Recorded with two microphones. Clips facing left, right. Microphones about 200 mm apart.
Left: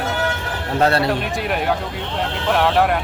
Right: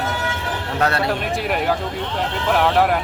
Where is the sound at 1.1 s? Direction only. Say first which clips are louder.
Even; centre (ahead or behind).